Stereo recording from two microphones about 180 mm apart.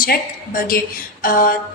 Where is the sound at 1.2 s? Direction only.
50° left (ahead or behind).